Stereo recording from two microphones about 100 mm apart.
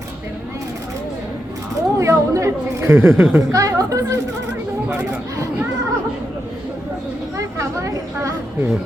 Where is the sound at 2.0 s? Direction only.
30° right (ahead or behind).